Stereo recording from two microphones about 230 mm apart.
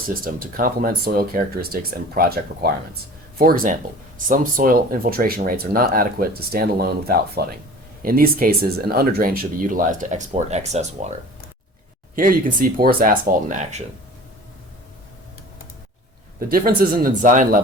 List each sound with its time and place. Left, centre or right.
0.1 s speech: right
12.1 s speech: right
16.5 s speech: right